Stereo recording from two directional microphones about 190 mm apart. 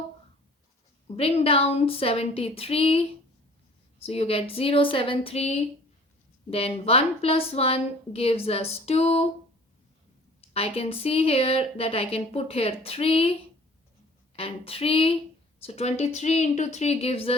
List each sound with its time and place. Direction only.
1.0 s a woman's voice: 30° left (ahead or behind)
4.0 s a woman's voice: 30° left (ahead or behind)
10.5 s a woman's voice: 30° left (ahead or behind)
14.3 s a woman's voice: 30° left (ahead or behind)